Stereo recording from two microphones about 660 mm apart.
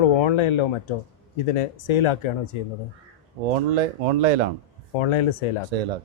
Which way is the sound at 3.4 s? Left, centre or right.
Right.